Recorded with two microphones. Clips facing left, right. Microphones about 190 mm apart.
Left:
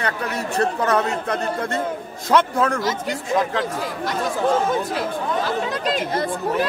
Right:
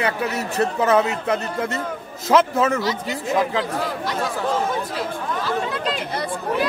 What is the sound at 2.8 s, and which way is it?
Speech, 45° left (ahead or behind).